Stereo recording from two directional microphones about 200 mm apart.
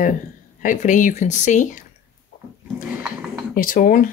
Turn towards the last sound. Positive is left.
turn(degrees=40)  # may be behind; listen again after turning